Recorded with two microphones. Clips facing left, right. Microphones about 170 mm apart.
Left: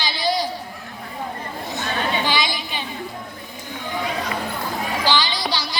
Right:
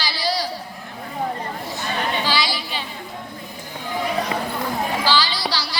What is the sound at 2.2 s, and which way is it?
Chatter, 20° left (ahead or behind).